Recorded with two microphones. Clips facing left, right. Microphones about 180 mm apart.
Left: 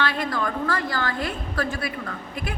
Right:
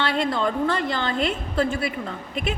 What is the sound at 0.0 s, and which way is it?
A woman's voice, 25° right (ahead or behind).